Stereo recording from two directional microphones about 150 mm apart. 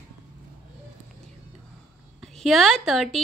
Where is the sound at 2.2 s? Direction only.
Centre (ahead or behind).